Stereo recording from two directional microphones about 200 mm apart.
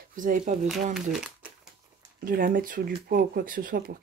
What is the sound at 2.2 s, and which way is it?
Speech, 45° right (ahead or behind).